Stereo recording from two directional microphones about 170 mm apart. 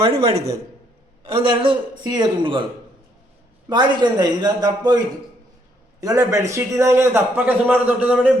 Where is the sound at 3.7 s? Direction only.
25° right (ahead or behind).